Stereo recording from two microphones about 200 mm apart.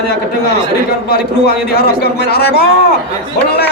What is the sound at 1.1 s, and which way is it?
A man's voice, 50° left (ahead or behind).